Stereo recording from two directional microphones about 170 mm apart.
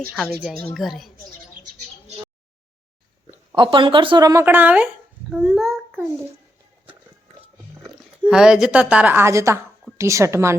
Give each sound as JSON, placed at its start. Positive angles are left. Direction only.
{"t": 0.2, "sound": "speech", "side_deg": 0}
{"t": 3.5, "sound": "speech", "side_deg": -30}
{"t": 7.9, "sound": "speech", "side_deg": -5}